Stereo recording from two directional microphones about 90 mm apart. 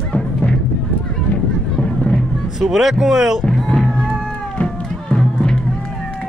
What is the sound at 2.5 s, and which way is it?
Speech, 5° right (ahead or behind).